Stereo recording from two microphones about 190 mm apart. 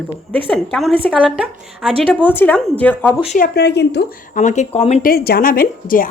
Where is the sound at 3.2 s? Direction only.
45° left (ahead or behind); by 4.0 s 60° left (ahead or behind).